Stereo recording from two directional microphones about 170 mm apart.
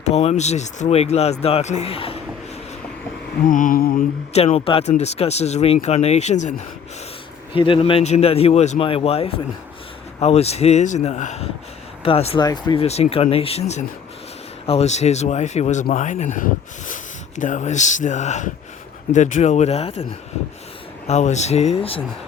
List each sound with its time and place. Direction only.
0.0 s speech: 40° left (ahead or behind)
3.4 s speech: 50° left (ahead or behind)
4.3 s speech: 40° left (ahead or behind)
7.5 s speech: 30° left (ahead or behind)
12.5 s speech: 25° left (ahead or behind)
12.8 s speech: 35° left (ahead or behind)
21.1 s speech: 45° left (ahead or behind)